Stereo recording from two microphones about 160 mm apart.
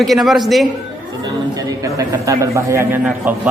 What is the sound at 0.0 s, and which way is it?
Speech, centre (ahead or behind).